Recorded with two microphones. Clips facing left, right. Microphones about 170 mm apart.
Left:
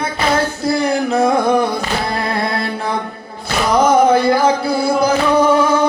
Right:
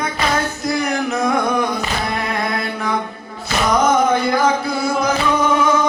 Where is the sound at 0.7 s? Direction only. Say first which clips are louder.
Left 4 dB; 30° left (ahead or behind).